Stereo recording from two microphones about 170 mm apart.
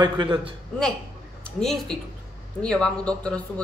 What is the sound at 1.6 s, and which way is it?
A woman's voice, centre (ahead or behind).